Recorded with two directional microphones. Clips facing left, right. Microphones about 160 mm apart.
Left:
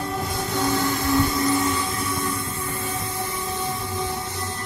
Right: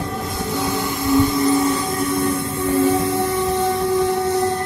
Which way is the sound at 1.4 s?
30° right (ahead or behind).